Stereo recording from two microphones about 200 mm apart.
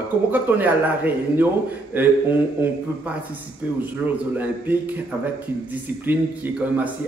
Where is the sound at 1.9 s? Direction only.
10° right (ahead or behind).